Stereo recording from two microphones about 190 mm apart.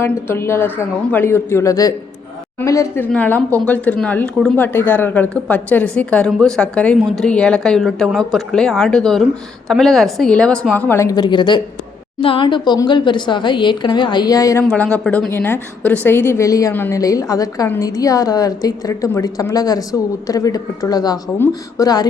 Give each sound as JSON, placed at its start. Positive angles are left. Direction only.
{"t": 0.0, "sound": "a woman's voice", "side_deg": 15}
{"t": 14.6, "sound": "a woman's voice", "side_deg": 5}